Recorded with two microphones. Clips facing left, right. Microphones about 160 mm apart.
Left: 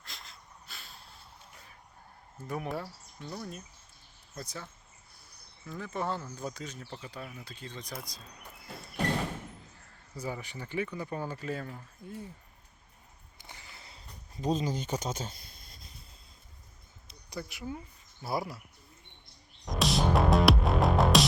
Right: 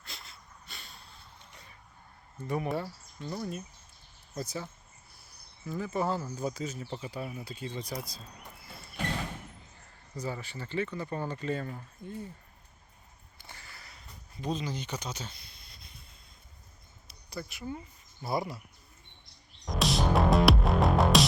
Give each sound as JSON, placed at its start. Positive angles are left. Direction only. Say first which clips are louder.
{"t": 0.0, "sound": "a sound", "louder": "right 1 dB", "side_deg": 0}
{"t": 2.4, "sound": "speech", "louder": "right 4 dB", "side_deg": 0}
{"t": 9.7, "sound": "a sound", "louder": "right 3 dB", "side_deg": 0}
{"t": 10.2, "sound": "speech", "louder": "even", "side_deg": 15}
{"t": 13.4, "sound": "a sound", "louder": "even", "side_deg": 15}
{"t": 14.4, "sound": "speech", "louder": "left 4 dB", "side_deg": 40}
{"t": 17.1, "sound": "insect", "louder": "even", "side_deg": 15}
{"t": 18.2, "sound": "speech", "louder": "right 1 dB", "side_deg": 5}
{"t": 19.6, "sound": "music", "louder": "even", "side_deg": 0}